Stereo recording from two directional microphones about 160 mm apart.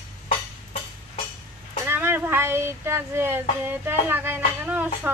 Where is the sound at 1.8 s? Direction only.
15° right (ahead or behind).